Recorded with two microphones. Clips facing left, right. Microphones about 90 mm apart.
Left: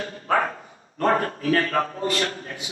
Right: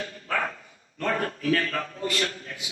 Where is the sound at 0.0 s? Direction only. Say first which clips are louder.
Left 6 dB; 35° left (ahead or behind).